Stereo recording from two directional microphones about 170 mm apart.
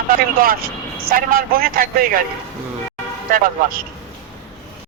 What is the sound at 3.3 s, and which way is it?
Speech, 55° right (ahead or behind).